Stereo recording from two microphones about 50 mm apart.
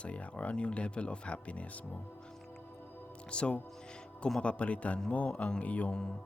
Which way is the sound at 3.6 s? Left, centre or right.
Centre.